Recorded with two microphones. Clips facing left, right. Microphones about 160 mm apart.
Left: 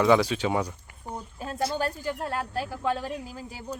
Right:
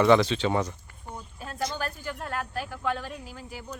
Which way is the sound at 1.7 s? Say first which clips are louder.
Left 5 dB; 35° left (ahead or behind).